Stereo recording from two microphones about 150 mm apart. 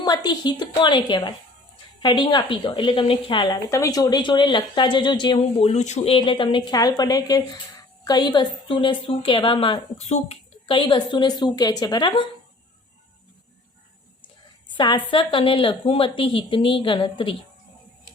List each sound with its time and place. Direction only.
0.0 s a woman's voice: 25° left (ahead or behind)
5.4 s speech: 45° left (ahead or behind)
6.1 s a woman's voice: 35° left (ahead or behind)
14.8 s a woman's voice: 30° left (ahead or behind)